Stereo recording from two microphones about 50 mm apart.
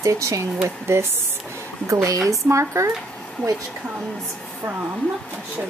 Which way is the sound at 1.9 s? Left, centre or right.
Right.